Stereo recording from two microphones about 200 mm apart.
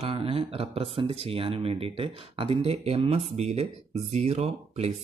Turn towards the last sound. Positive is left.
turn(degrees=-30)  # may be behind; listen again after turning